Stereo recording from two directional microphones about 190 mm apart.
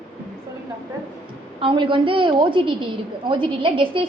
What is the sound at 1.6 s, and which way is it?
A woman's voice, 25° right (ahead or behind).